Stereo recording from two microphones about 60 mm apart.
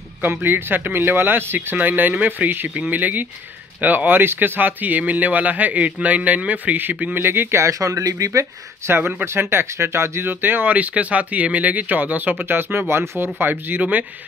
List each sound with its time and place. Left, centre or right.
0.2 s speech: right
7.2 s speech: right
8.3 s speech: right